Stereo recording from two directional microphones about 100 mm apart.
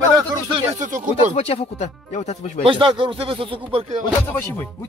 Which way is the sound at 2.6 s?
55° right (ahead or behind).